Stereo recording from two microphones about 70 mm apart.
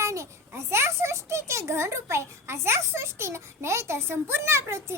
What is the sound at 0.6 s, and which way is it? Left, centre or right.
A child's voice, right.